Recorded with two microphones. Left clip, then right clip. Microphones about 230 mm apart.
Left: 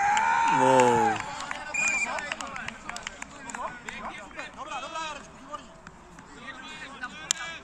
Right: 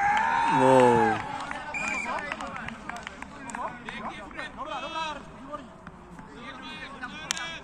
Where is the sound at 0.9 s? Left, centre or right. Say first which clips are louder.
Right 1 dB; left.